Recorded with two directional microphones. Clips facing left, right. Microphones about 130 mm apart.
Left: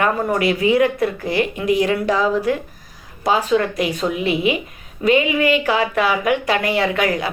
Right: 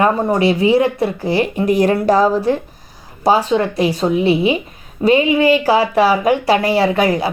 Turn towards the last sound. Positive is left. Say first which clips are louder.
# right 4 dB
turn(degrees=-30)  # may be behind; listen again after turning